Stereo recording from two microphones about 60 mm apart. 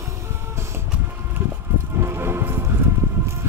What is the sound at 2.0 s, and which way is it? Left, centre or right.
Music, right.